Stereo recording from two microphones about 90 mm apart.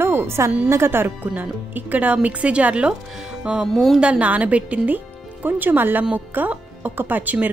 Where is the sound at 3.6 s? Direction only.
Centre (ahead or behind).